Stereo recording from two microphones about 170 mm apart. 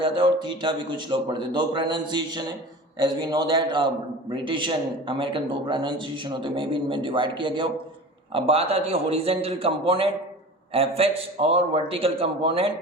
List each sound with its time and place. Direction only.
0.0 s a man's voice: 30° right (ahead or behind)